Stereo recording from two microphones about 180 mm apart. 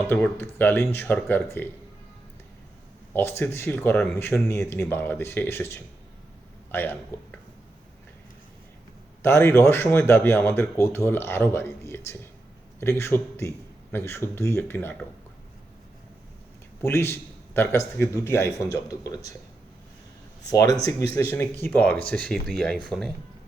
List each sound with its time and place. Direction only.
0.1 s speech: 10° left (ahead or behind)
3.1 s speech: 15° left (ahead or behind)
9.2 s speech: 15° left (ahead or behind)
16.8 s speech: 15° left (ahead or behind)
20.4 s speech: 20° left (ahead or behind); by 23.1 s centre (ahead or behind)